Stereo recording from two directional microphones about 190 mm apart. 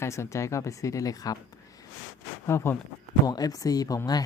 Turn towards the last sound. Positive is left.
turn(degrees=20)  # may be behind; listen again after turning